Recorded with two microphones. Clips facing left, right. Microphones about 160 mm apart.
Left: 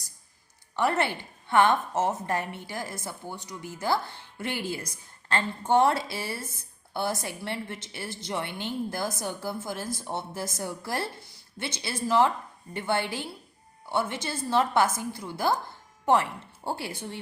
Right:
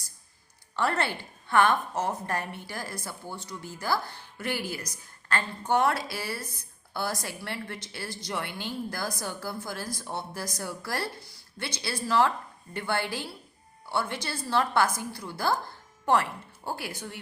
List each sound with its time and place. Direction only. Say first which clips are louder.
0.8 s a woman's voice: left 2 dB; 20° left (ahead or behind)
16.6 s a woman's voice: left 2 dB; 25° left (ahead or behind)